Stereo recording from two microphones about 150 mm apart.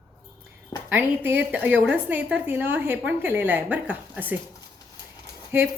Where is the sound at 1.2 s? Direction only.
15° right (ahead or behind).